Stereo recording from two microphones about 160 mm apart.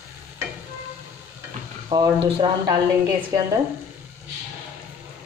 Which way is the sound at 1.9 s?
30° right (ahead or behind).